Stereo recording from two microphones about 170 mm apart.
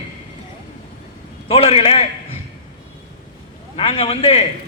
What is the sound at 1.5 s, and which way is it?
Speech, 35° left (ahead or behind).